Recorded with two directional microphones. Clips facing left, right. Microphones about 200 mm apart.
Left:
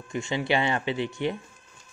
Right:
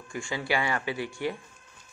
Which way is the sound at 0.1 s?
20° left (ahead or behind).